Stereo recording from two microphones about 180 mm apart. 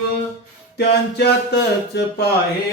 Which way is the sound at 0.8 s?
65° left (ahead or behind).